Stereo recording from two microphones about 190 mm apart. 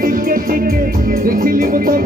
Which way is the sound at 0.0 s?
50° right (ahead or behind).